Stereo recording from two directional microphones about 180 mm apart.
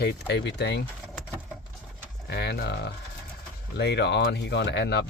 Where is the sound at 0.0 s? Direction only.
65° left (ahead or behind).